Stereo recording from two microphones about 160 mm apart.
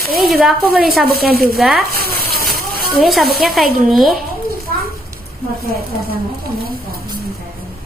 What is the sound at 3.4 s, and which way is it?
Speech, centre (ahead or behind).